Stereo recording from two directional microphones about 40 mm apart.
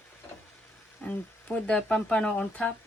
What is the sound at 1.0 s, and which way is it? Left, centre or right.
Frying, left.